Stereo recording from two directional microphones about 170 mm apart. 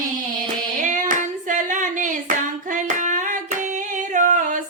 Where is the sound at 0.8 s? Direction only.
50° right (ahead or behind).